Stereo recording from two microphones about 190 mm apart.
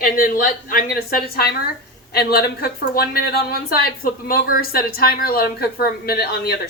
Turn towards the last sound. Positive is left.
turn(degrees=55)  # may be behind; listen again after turning